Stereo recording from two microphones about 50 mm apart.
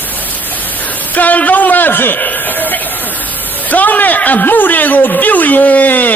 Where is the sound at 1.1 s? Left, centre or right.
Left.